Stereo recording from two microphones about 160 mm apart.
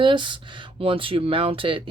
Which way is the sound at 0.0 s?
30° right (ahead or behind).